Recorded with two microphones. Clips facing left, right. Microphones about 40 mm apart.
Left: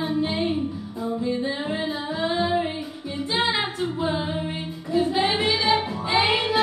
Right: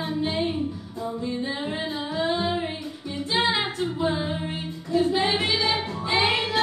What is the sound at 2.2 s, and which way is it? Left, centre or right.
Singing, centre.